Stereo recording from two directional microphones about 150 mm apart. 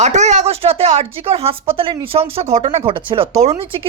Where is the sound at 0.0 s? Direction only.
50° right (ahead or behind).